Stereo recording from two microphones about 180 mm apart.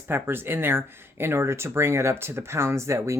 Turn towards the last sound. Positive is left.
turn(degrees=-15)  # may be behind; listen again after turning